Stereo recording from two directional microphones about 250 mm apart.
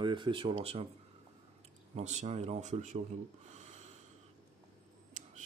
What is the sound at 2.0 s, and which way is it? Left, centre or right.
Speech, right.